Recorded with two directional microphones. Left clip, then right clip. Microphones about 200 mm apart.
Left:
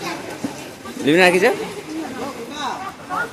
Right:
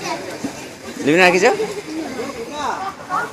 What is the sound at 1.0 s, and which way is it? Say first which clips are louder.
Speech: right 1 dB; 10° left (ahead or behind).